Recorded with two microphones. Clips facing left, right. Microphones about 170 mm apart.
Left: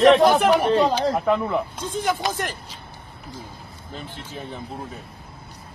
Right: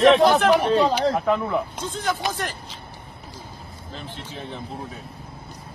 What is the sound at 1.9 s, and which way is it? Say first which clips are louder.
Speech: left 3 dB; 15° left (ahead or behind).